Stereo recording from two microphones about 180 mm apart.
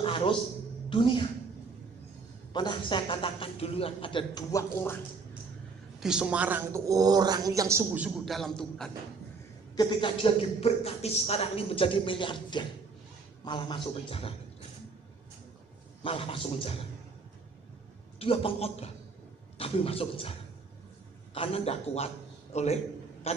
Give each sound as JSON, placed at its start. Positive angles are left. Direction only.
{"t": 0.0, "sound": "a sound", "side_deg": 30}
{"t": 0.8, "sound": "a woman's voice", "side_deg": 25}
{"t": 2.5, "sound": "a man's voice", "side_deg": 25}
{"t": 5.9, "sound": "a woman's voice", "side_deg": -5}
{"t": 8.4, "sound": "a man's voice", "side_deg": 0}
{"t": 9.8, "sound": "a man's voice", "side_deg": 25}
{"t": 16.0, "sound": "a man's voice", "side_deg": 30}
{"t": 18.2, "sound": "a man's voice", "side_deg": 30}